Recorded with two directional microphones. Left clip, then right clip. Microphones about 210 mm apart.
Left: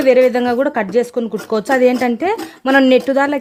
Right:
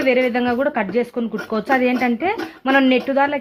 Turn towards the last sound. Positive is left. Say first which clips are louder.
# left 4 dB
turn(degrees=55)  # may be behind; listen again after turning